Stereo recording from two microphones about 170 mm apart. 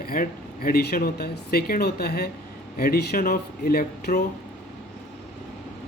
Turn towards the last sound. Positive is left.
turn(degrees=60)  # may be behind; listen again after turning